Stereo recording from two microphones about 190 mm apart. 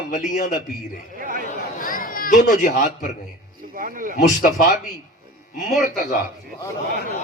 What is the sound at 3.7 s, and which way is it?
Speech, 45° right (ahead or behind).